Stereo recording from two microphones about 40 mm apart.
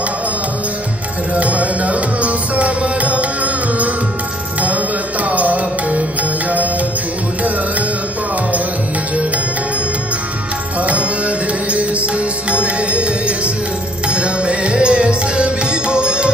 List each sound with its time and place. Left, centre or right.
1.3 s music: right
10.8 s music: right